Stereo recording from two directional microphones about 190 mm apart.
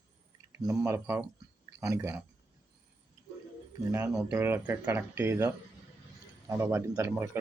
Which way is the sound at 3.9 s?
10° right (ahead or behind).